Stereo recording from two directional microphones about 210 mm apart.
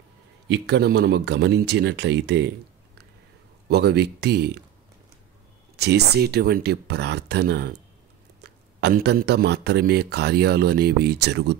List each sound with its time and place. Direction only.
0.5 s speech: 55° right (ahead or behind)
3.6 s speech: 50° right (ahead or behind)
5.8 s speech: 50° right (ahead or behind)